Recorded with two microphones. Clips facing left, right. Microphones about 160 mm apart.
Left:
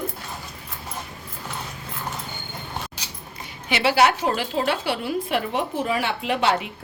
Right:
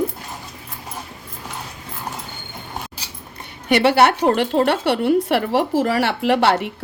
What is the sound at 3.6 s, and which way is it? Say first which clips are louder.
A woman's voice: right 5 dB; 60° right (ahead or behind).